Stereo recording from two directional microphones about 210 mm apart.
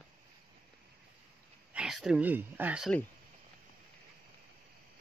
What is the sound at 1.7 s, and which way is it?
Speech, 5° right (ahead or behind).